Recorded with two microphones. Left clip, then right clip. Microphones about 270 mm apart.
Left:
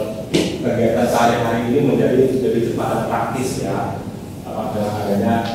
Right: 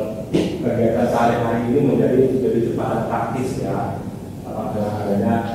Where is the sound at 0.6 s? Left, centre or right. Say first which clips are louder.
Left 1 dB; centre.